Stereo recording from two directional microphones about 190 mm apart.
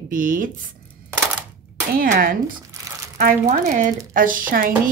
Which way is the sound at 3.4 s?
40° right (ahead or behind).